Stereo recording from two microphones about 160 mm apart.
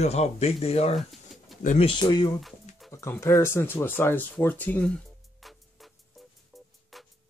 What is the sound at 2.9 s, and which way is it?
Speech, 15° left (ahead or behind).